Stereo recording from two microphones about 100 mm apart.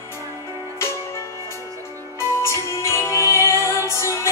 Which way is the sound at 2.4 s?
30° left (ahead or behind).